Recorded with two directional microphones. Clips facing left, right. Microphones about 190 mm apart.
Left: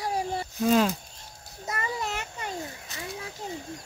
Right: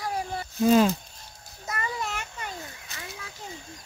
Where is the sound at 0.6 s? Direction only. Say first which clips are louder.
Right 3 dB; 5° right (ahead or behind).